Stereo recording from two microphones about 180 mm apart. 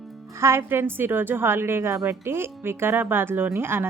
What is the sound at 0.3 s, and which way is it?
A woman's voice, 15° right (ahead or behind).